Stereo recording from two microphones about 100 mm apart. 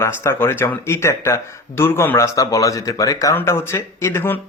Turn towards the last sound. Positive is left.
turn(degrees=20)  # may be behind; listen again after turning